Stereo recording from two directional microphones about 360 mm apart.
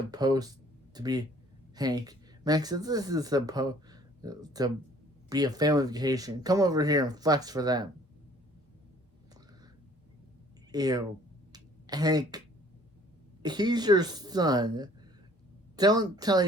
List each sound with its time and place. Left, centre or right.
0.1 s speech: centre
10.7 s a woman's voice: centre
11.5 s a sound: centre
13.4 s speech: centre